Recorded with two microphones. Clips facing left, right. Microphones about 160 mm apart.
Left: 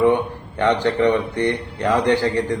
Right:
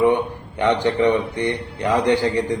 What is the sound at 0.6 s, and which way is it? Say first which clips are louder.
A man's voice: even; 15° right (ahead or behind).